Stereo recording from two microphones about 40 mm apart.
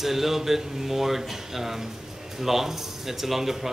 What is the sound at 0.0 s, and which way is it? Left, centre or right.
A man's voice, centre.